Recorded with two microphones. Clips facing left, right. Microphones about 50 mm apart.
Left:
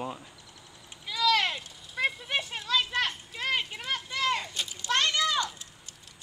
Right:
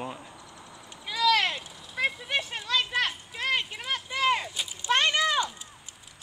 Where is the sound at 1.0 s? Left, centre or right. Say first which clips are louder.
Right 2 dB; centre.